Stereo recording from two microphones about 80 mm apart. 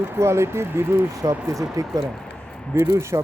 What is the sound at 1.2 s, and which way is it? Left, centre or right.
Speech, right.